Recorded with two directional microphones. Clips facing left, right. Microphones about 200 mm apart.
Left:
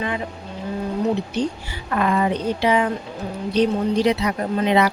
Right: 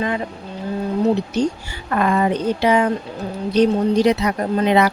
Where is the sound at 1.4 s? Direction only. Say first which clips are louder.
Right 4 dB; 40° right (ahead or behind).